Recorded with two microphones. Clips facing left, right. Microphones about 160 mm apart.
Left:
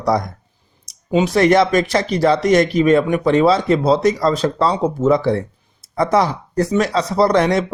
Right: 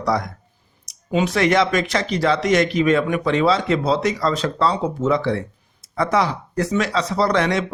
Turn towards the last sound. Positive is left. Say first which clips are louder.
# left 4 dB
turn(degrees=40)  # may be behind; listen again after turning